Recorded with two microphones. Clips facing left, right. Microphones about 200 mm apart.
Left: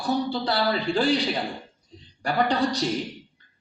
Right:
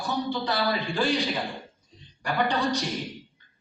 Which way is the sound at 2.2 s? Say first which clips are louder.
Left 3 dB; 35° left (ahead or behind).